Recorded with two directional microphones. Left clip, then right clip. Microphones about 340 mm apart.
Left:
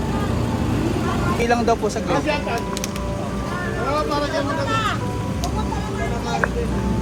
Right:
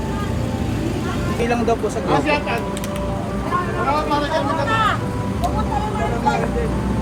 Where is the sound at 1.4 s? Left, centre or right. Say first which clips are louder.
Even; left.